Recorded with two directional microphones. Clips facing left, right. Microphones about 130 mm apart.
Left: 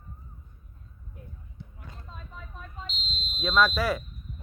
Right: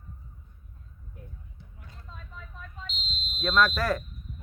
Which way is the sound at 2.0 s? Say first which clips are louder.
Even; 20° left (ahead or behind).